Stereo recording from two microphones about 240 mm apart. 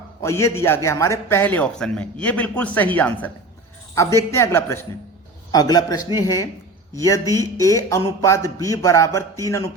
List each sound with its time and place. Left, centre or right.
0.2 s a man's voice: centre